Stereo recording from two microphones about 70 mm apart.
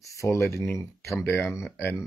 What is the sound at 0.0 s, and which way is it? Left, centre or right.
Speech, left.